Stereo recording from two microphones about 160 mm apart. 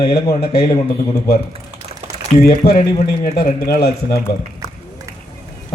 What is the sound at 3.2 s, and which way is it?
Speech, 70° left (ahead or behind).